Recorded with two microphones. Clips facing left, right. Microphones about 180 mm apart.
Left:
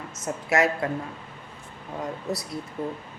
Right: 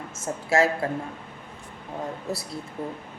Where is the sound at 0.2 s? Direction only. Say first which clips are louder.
Right 1 dB; 25° right (ahead or behind).